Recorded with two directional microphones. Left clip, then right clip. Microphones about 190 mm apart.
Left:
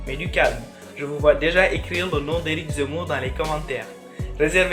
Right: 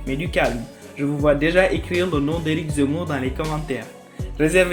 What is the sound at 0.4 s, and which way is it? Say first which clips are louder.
Speech: left 4 dB; 35° right (ahead or behind).